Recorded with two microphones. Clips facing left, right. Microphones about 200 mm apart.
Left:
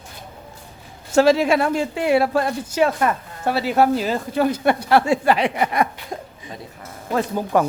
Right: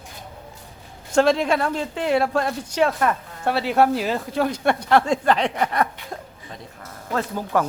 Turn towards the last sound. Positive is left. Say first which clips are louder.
# left 3 dB
turn(degrees=15)  # may be behind; listen again after turning